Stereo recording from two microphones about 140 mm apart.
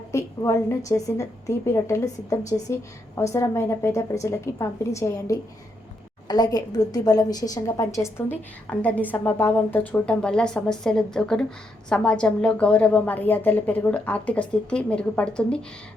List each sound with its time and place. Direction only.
0.1 s a woman's voice: 20° left (ahead or behind)
8.7 s a woman's voice: 10° left (ahead or behind)